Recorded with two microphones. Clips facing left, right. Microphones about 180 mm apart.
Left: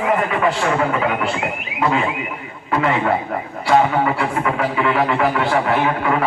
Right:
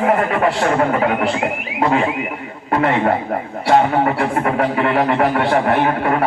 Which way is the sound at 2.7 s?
35° right (ahead or behind).